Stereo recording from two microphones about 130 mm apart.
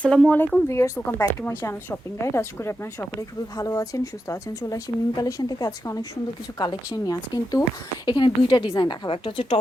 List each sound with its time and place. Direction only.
0.0 s a woman's voice: 10° left (ahead or behind); by 9.6 s 45° left (ahead or behind)